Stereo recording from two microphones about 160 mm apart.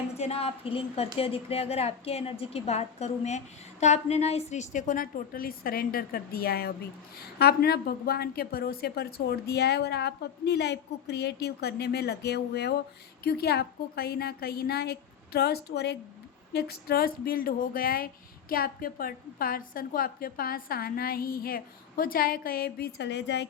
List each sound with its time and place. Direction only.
0.1 s a woman's voice: 40° left (ahead or behind); by 12.7 s 90° left
13.2 s speech: 80° left